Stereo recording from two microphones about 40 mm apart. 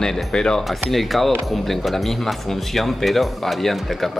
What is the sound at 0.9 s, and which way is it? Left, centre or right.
Speech, centre.